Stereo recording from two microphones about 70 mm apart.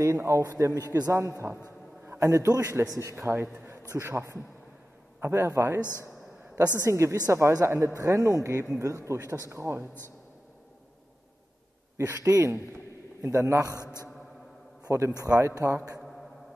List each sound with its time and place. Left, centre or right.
0.0 s a man's voice: right
0.6 s a man's voice: right
1.4 s a man's voice: right
2.0 s a man's voice: right
3.2 s a man's voice: right
5.8 s a man's voice: left
6.8 s a man's voice: right
8.0 s speech: right
12.2 s a man's voice: right
12.7 s a sound: right
13.7 s a man's voice: left
14.9 s speech: right